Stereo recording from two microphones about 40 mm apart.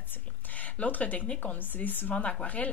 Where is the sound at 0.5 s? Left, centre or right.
Left.